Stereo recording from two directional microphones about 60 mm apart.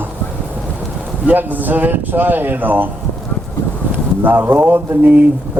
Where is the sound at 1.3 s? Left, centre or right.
Right.